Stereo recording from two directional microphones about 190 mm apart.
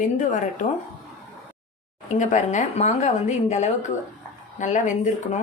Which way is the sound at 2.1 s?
40° left (ahead or behind).